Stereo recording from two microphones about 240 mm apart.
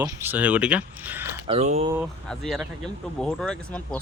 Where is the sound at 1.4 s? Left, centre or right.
Right.